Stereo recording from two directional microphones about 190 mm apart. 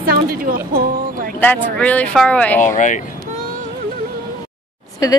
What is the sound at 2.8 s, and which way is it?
Speech, 40° left (ahead or behind).